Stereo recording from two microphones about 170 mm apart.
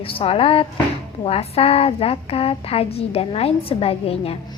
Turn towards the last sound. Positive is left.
turn(degrees=35)  # may be behind; listen again after turning